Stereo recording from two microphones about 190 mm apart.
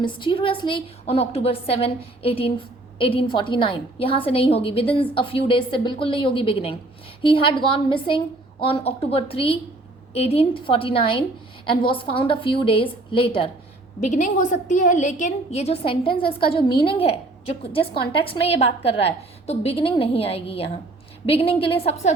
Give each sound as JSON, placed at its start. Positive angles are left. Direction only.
{"t": 0.0, "sound": "a woman's voice", "side_deg": 25}
{"t": 14.0, "sound": "a woman's voice", "side_deg": 40}